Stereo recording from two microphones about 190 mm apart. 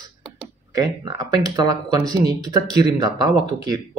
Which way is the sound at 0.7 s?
20° right (ahead or behind).